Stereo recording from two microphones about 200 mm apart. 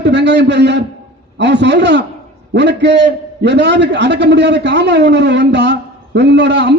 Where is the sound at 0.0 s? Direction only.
60° right (ahead or behind).